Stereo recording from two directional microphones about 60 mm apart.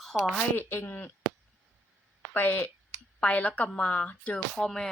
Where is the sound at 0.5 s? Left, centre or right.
Left.